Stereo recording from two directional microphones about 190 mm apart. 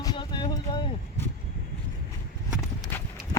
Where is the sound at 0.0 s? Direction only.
25° left (ahead or behind).